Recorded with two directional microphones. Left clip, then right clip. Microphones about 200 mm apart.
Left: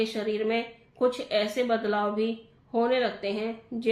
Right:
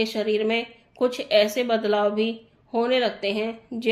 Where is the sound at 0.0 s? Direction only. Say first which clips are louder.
Right 5 dB; 45° right (ahead or behind).